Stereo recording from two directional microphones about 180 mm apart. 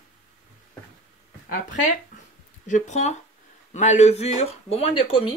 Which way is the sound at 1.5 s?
45° left (ahead or behind).